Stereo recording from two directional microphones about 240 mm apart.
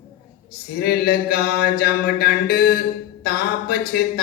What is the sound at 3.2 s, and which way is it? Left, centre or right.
Speech, left.